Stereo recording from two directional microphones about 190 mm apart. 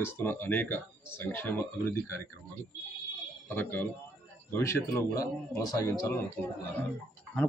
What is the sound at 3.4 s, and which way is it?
Speech, 10° left (ahead or behind).